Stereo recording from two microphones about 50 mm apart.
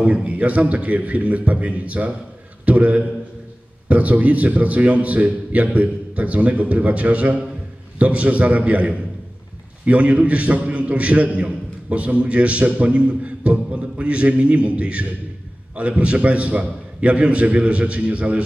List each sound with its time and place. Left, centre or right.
0.0 s a man's voice: right
2.6 s a sound: right
3.9 s a man's voice: right